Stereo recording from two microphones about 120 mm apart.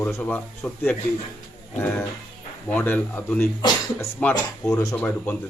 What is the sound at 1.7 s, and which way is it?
Speech, 15° left (ahead or behind).